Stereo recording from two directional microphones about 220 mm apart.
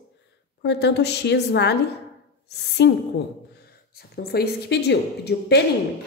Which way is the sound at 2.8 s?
50° left (ahead or behind).